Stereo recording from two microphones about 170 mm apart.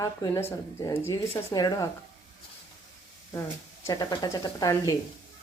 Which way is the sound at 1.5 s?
20° left (ahead or behind).